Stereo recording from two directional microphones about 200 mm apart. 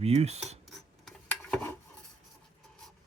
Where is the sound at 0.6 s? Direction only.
Centre (ahead or behind).